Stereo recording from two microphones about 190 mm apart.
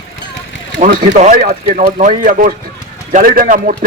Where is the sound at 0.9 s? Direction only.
45° right (ahead or behind).